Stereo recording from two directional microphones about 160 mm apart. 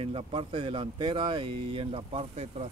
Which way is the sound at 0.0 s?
35° right (ahead or behind).